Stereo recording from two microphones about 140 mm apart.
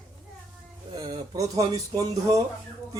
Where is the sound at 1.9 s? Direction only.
25° right (ahead or behind).